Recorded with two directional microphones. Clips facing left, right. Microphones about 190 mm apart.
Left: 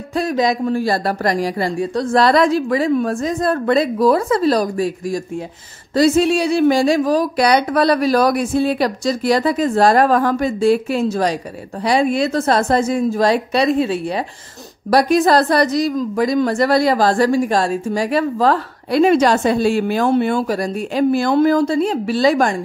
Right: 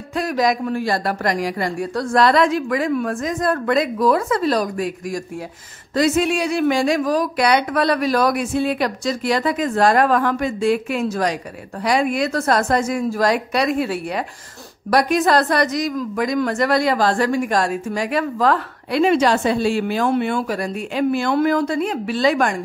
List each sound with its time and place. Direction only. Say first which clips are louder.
0.1 s a woman's voice: left 2 dB; 25° left (ahead or behind)